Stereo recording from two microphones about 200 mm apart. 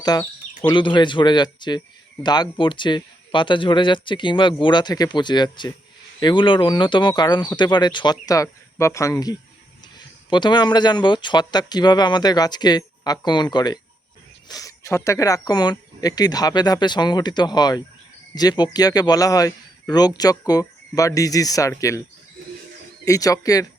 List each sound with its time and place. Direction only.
0.0 s speech: 20° left (ahead or behind)
23.0 s speech: 15° left (ahead or behind)